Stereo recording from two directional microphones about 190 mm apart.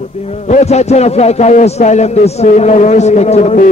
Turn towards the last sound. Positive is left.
turn(degrees=35)  # may be behind; listen again after turning